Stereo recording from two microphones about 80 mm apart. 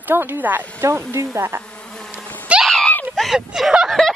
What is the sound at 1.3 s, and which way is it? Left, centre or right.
Insect, right.